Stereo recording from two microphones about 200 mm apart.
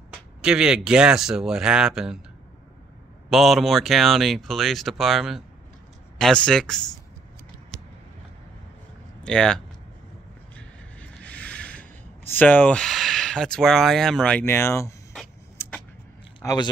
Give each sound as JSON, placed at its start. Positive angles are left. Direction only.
{"t": 0.1, "sound": "speech", "side_deg": -5}
{"t": 3.3, "sound": "speech", "side_deg": 0}
{"t": 9.2, "sound": "speech", "side_deg": 5}
{"t": 10.5, "sound": "a sound", "side_deg": 5}
{"t": 15.5, "sound": "vehicle", "side_deg": 10}
{"t": 16.3, "sound": "a sound", "side_deg": 20}